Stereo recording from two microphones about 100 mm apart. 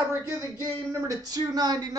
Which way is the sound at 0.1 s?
25° right (ahead or behind).